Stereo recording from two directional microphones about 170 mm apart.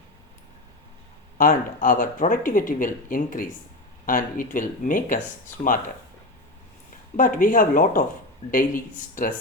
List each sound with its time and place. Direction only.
1.4 s speech: 50° left (ahead or behind)
7.2 s speech: 55° left (ahead or behind)